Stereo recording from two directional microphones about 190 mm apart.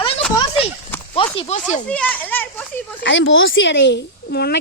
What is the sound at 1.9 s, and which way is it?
Speech, 5° left (ahead or behind).